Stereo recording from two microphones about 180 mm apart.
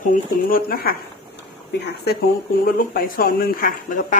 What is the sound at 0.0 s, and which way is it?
Speech, 50° left (ahead or behind).